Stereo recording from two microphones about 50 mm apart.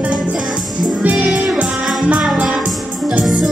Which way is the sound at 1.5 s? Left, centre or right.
Centre.